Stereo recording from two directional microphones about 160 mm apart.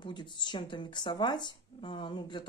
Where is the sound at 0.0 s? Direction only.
30° left (ahead or behind).